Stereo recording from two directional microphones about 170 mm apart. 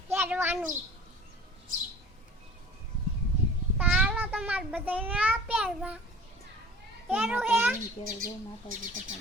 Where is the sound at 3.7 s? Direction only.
5° right (ahead or behind).